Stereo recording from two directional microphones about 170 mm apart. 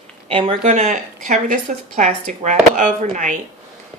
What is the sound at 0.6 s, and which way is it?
Speech, 45° right (ahead or behind).